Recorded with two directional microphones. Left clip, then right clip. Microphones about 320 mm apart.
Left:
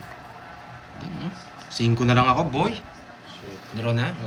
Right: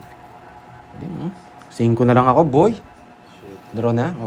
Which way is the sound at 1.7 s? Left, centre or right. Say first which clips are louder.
Right 7 dB; centre.